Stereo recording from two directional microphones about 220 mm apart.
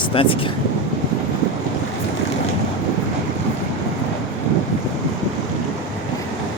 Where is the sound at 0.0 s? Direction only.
25° left (ahead or behind).